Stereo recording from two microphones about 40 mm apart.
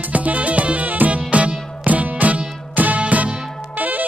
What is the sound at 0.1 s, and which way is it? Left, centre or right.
Music, right.